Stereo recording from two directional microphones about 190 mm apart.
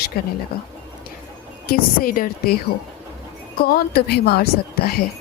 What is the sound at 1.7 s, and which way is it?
A woman's voice, 50° left (ahead or behind).